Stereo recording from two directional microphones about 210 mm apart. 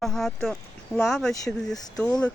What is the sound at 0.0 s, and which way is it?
Speech, centre (ahead or behind).